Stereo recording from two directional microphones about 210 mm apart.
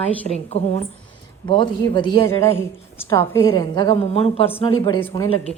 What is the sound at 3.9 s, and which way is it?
A woman's voice, 30° left (ahead or behind).